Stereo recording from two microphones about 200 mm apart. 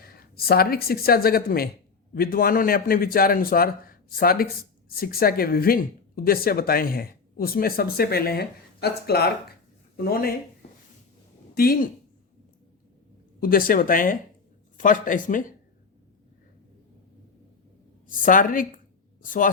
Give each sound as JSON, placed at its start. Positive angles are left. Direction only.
{"t": 0.0, "sound": "speech", "side_deg": 50}
{"t": 10.6, "sound": "a sound", "side_deg": 35}
{"t": 11.5, "sound": "speech", "side_deg": 50}
{"t": 13.4, "sound": "speech", "side_deg": 45}
{"t": 18.3, "sound": "speech", "side_deg": 45}